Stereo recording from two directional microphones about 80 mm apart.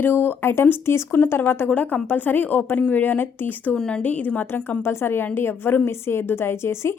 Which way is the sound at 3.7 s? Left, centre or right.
Centre.